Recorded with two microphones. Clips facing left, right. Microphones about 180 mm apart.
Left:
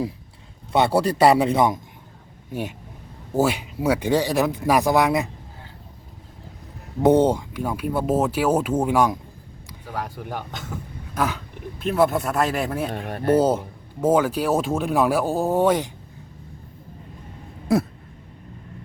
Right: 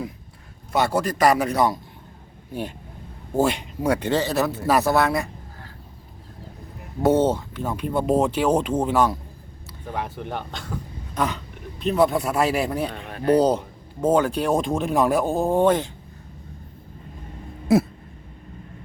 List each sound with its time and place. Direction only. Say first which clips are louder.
0.7 s a man's voice: left 3 dB; 30° left (ahead or behind)
2.5 s speech: left 1 dB; 10° left (ahead or behind)
7.0 s speech: left 2 dB; 15° left (ahead or behind)